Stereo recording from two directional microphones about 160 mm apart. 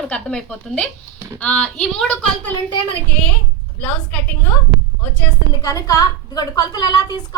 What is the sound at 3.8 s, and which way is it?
Speech, 10° left (ahead or behind).